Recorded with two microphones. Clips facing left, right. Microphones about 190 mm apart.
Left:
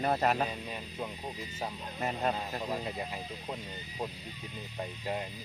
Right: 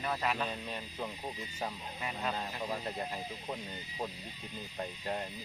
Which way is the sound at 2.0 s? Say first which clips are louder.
Left 6 dB; 45° left (ahead or behind).